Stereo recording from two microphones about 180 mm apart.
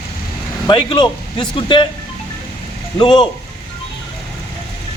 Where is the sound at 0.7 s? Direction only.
25° left (ahead or behind).